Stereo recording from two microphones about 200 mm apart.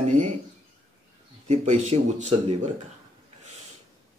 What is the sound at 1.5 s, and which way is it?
Speech, 35° right (ahead or behind).